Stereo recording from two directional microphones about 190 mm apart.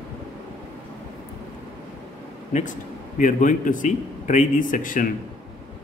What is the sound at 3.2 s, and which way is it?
A man's voice, 45° left (ahead or behind).